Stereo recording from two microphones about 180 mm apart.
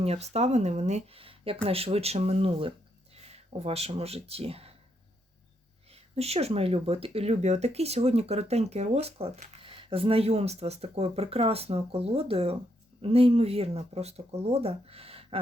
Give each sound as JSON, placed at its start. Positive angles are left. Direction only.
{"t": 0.0, "sound": "speech", "side_deg": -35}
{"t": 5.9, "sound": "speech", "side_deg": -35}